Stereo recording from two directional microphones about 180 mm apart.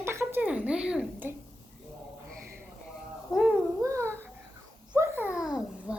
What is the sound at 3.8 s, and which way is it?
Babbling, 15° right (ahead or behind).